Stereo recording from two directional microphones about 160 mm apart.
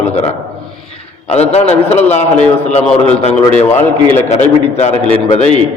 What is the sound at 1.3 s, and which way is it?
A man's voice, 40° left (ahead or behind).